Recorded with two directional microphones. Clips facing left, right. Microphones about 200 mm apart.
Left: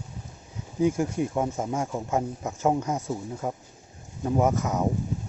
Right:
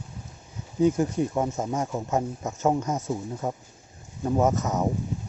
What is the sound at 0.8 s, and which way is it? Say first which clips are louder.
Speech: right 2 dB; 10° left (ahead or behind).